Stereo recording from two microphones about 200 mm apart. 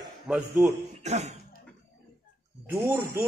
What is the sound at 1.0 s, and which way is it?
Speech, 35° right (ahead or behind).